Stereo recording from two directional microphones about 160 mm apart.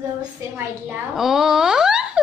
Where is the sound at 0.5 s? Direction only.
5° right (ahead or behind).